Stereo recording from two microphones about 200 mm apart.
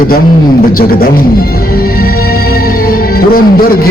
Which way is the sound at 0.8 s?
50° left (ahead or behind).